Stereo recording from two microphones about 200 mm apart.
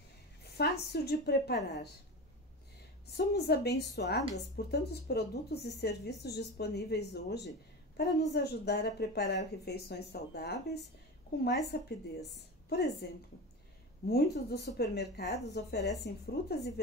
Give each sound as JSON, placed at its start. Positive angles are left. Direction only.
{"t": 0.6, "sound": "a woman's voice", "side_deg": 55}
{"t": 3.2, "sound": "a woman's voice", "side_deg": 55}